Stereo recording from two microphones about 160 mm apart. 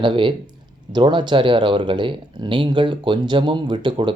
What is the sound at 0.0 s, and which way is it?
Speech, 30° right (ahead or behind).